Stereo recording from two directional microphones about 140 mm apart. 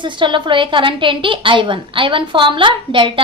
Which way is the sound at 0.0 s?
35° right (ahead or behind).